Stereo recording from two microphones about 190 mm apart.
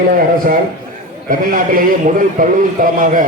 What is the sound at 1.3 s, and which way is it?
A man's voice, 45° right (ahead or behind).